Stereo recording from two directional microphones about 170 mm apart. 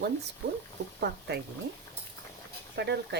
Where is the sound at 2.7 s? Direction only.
80° right.